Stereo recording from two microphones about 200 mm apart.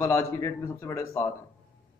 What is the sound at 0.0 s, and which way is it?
Speech, 15° left (ahead or behind).